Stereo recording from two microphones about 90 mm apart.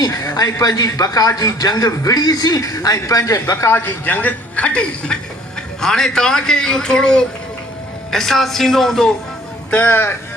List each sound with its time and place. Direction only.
0.0 s a man's voice: 40° left (ahead or behind); by 9.1 s 5° left (ahead or behind)
9.7 s speech: 25° left (ahead or behind)